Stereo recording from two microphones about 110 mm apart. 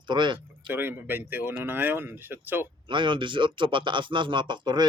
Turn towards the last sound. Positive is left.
turn(degrees=-45)  # may be behind; listen again after turning